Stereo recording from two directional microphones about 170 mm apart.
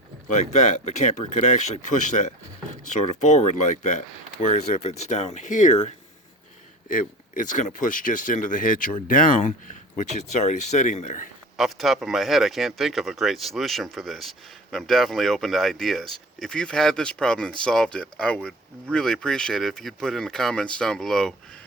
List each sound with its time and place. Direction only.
0.3 s speech: 45° left (ahead or behind)
6.8 s speech: 50° left (ahead or behind)
11.5 s speech: centre (ahead or behind)